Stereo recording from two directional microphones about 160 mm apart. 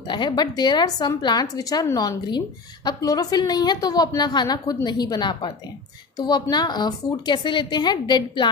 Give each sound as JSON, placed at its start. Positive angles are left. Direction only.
{"t": 0.1, "sound": "speech", "side_deg": 25}